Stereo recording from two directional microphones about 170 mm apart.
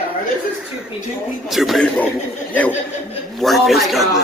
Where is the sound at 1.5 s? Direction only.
Centre (ahead or behind).